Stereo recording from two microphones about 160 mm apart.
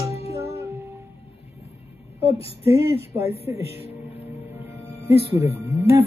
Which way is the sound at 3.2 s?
40° left (ahead or behind).